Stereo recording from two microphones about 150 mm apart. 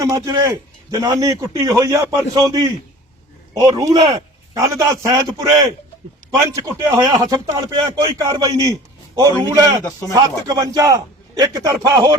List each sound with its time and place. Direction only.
0.0 s speech: 25° right (ahead or behind)
6.6 s speech: 25° right (ahead or behind)